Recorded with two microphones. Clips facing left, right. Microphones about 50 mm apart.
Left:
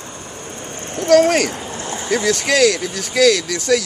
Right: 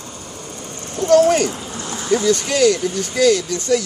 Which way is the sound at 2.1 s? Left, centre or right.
Left.